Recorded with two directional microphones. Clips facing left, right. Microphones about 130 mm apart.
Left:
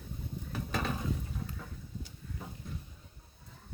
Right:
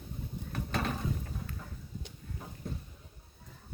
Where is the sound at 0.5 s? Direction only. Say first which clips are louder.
Right 1 dB; centre (ahead or behind).